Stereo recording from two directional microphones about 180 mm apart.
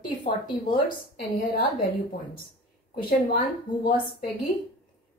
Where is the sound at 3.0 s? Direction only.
50° left (ahead or behind).